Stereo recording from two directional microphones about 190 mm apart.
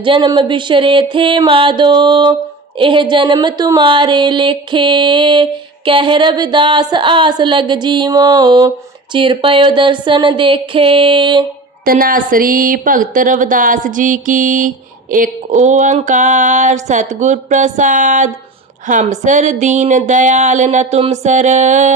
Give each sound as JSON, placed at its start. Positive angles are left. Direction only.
{"t": 0.0, "sound": "speech", "side_deg": -25}
{"t": 11.9, "sound": "speech", "side_deg": -50}
{"t": 15.1, "sound": "a sound", "side_deg": -40}